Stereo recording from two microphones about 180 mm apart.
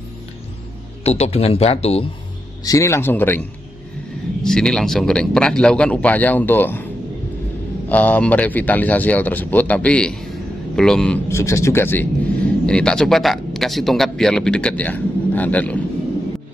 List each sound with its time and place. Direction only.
1.0 s speech: 35° left (ahead or behind)
2.6 s a man's voice: 15° left (ahead or behind)
7.9 s a man's voice: 10° left (ahead or behind)
11.2 s a man's voice: 15° left (ahead or behind)